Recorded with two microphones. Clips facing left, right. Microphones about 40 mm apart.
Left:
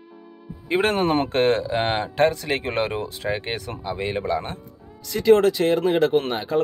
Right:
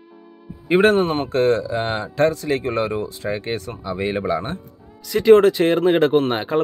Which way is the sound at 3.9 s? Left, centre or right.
Centre.